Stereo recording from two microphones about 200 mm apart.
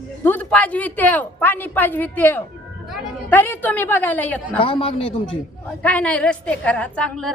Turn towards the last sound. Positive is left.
turn(degrees=5)  # may be behind; listen again after turning